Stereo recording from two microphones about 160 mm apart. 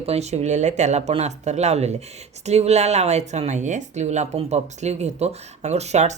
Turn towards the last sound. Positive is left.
turn(degrees=-45)  # may be behind; listen again after turning